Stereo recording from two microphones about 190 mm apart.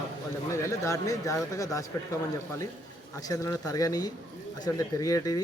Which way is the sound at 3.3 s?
15° left (ahead or behind).